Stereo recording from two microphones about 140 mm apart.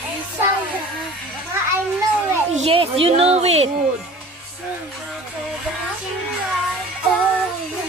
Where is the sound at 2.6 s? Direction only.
40° right (ahead or behind).